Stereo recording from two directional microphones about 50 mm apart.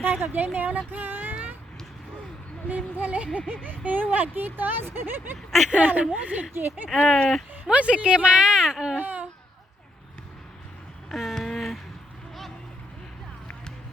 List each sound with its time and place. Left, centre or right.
0.0 s speech: right
2.6 s speech: right
5.5 s speech: centre
5.7 s speech: right
6.5 s speech: right
7.0 s speech: centre
7.5 s speech: right
9.0 s baby cry: right
11.1 s a sound: centre